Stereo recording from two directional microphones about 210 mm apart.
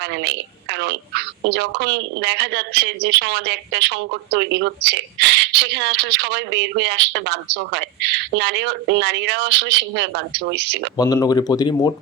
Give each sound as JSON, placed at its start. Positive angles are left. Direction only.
{"t": 0.2, "sound": "a woman's voice", "side_deg": -55}
{"t": 10.9, "sound": "speech", "side_deg": 15}